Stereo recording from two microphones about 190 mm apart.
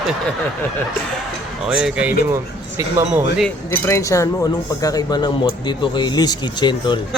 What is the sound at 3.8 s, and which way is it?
Speech, 15° left (ahead or behind).